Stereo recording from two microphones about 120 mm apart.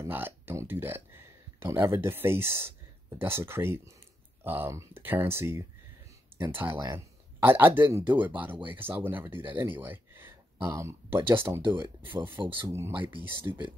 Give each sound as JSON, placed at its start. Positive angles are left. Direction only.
{"t": 0.0, "sound": "speech", "side_deg": -20}